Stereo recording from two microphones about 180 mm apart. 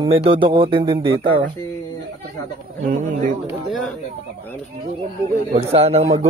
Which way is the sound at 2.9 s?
45° right (ahead or behind).